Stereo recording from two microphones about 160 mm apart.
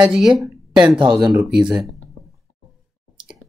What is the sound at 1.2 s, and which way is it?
Speech, 20° right (ahead or behind).